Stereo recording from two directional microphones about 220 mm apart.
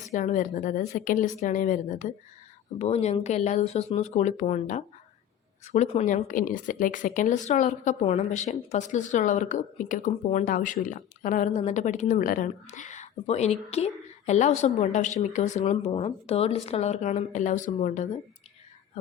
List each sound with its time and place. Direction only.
0.0 s a woman's voice: 35° left (ahead or behind)